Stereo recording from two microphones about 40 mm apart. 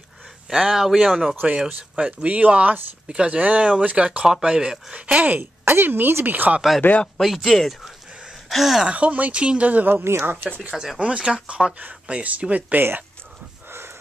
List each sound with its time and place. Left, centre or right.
0.5 s speech: centre
1.7 s speech: right
4.3 s speech: centre
5.0 s speech: right
5.4 s speech: right
6.8 s speech: left
7.2 s speech: centre
7.4 s speech: centre
8.8 s speech: right
9.4 s speech: right
9.7 s speech: right
11.0 s speech: right
12.7 s speech: right